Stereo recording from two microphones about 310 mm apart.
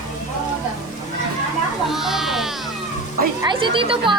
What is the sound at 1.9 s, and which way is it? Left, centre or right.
Music, centre.